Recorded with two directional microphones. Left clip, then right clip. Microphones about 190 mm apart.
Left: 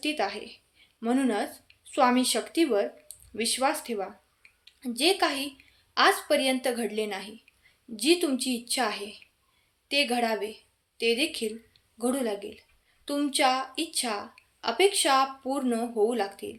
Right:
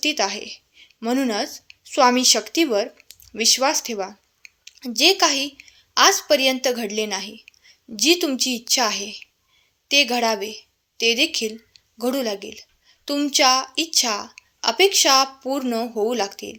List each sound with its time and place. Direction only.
0.0 s a woman's voice: 35° right (ahead or behind)